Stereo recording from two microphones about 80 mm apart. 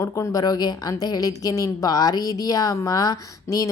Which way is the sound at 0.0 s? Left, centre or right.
Left.